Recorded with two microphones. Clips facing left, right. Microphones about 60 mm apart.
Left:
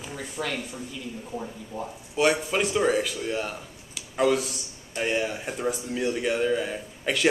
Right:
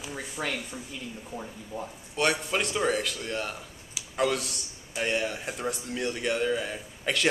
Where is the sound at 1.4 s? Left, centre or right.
Centre.